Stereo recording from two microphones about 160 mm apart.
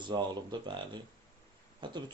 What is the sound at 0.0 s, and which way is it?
Speech, 30° right (ahead or behind).